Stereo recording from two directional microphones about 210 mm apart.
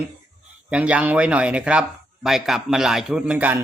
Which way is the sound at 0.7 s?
5° right (ahead or behind).